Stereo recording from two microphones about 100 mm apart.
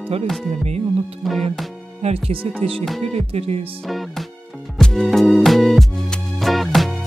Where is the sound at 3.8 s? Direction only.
Centre (ahead or behind).